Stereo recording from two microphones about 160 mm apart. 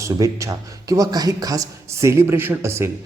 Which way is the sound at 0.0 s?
20° right (ahead or behind).